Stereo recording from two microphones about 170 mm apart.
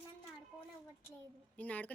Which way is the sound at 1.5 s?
10° left (ahead or behind).